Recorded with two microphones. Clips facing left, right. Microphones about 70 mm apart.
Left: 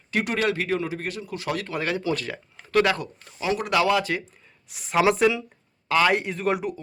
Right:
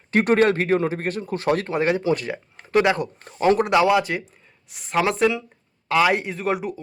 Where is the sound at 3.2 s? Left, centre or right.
Right.